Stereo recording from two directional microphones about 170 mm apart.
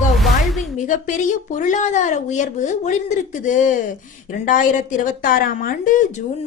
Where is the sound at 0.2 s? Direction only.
Centre (ahead or behind).